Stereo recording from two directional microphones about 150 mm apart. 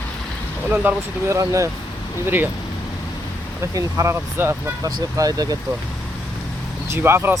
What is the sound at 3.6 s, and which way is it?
Speech, 20° right (ahead or behind).